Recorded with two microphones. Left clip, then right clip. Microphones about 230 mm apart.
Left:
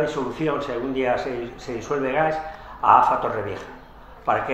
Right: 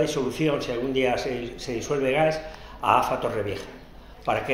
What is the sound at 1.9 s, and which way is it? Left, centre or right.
Speech, right.